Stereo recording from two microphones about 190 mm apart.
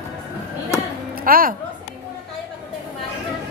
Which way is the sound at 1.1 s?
50° right (ahead or behind).